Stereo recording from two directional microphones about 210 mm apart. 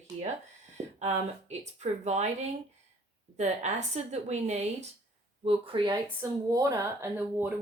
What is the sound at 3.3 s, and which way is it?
A woman's voice, 30° right (ahead or behind).